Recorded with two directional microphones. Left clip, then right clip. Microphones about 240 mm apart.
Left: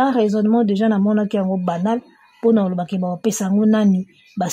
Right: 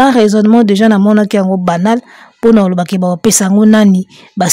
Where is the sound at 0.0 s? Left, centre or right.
Right.